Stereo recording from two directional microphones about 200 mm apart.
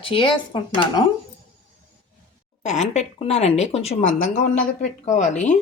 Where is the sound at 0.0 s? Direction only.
25° left (ahead or behind).